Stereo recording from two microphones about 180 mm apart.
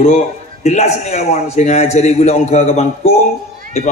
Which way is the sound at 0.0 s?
40° left (ahead or behind).